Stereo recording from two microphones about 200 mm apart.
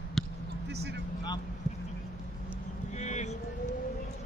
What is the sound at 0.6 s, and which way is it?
Vehicle, 55° right (ahead or behind).